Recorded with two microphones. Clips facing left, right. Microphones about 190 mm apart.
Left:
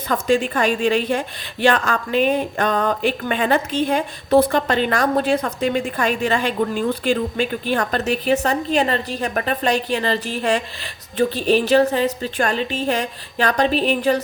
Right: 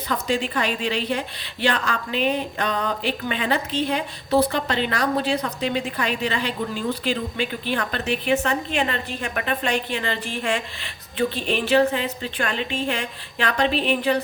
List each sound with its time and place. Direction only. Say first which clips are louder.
0.1 s a woman's voice: left 6 dB; 50° left (ahead or behind)